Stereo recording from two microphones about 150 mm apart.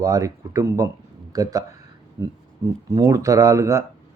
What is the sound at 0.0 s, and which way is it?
Speech, 20° right (ahead or behind).